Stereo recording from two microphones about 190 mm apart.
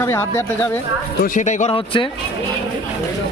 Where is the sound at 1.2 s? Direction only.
40° left (ahead or behind).